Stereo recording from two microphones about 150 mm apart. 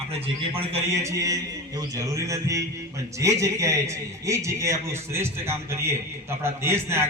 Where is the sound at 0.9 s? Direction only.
20° right (ahead or behind).